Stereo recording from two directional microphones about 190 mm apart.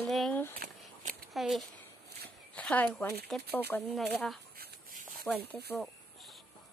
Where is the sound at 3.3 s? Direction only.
Centre (ahead or behind).